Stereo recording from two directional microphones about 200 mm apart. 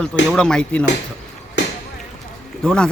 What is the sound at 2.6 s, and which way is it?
Speech, 5° left (ahead or behind).